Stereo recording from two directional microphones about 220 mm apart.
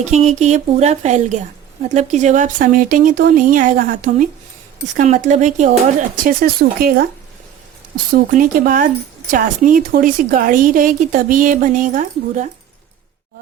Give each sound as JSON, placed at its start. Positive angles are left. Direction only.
{"t": 0.0, "sound": "speech", "side_deg": -30}
{"t": 8.1, "sound": "speech", "side_deg": -35}